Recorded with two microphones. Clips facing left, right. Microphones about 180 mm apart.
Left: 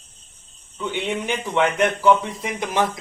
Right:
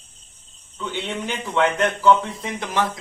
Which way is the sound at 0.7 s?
15° left (ahead or behind).